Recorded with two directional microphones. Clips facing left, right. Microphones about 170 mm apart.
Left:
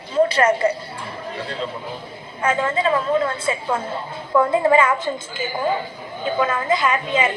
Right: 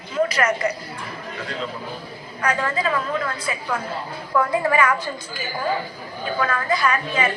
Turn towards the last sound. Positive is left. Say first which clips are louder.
# left 2 dB
turn(degrees=20)  # may be behind; listen again after turning